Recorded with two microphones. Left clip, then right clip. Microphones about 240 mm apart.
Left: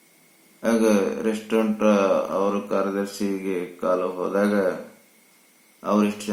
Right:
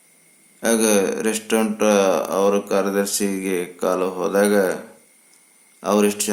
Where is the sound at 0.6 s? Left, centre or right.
Right.